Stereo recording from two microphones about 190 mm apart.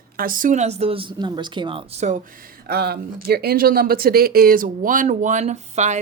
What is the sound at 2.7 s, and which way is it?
Speech, 55° right (ahead or behind).